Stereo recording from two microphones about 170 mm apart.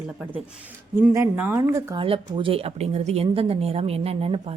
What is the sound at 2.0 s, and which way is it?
A woman's voice, 30° right (ahead or behind).